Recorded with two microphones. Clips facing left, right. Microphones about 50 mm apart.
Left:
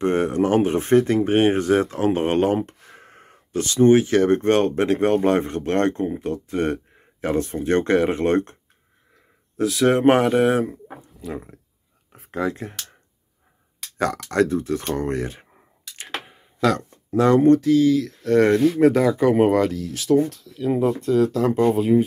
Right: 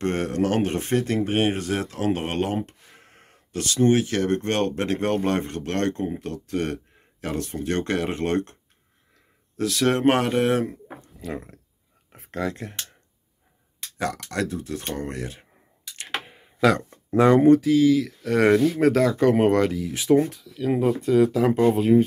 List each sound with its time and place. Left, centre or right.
0.0 s speech: centre
9.6 s speech: centre
12.1 s a sound: centre
12.4 s speech: centre
13.9 s speech: left
17.2 s speech: centre
17.5 s speech: centre
18.7 s speech: centre
19.7 s speech: centre
20.4 s speech: centre
20.8 s speech: centre